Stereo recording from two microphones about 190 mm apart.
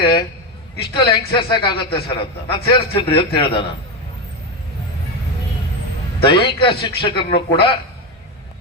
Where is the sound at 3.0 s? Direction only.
30° left (ahead or behind).